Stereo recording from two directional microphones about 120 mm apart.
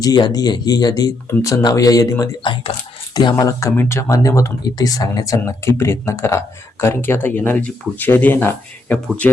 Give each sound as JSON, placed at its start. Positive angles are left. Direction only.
{"t": 0.0, "sound": "speech", "side_deg": 35}
{"t": 2.4, "sound": "speech", "side_deg": 45}
{"t": 3.2, "sound": "speech", "side_deg": 35}